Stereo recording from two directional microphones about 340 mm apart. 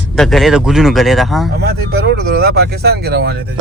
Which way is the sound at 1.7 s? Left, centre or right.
Right.